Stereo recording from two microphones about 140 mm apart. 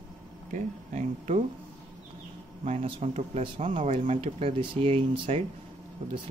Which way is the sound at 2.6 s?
45° right (ahead or behind).